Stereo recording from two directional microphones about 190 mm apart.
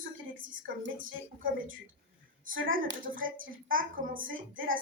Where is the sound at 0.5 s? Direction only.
80° right.